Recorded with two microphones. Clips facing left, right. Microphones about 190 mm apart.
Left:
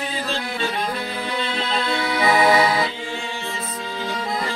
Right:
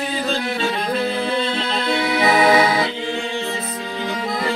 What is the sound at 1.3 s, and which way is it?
Music, 30° right (ahead or behind).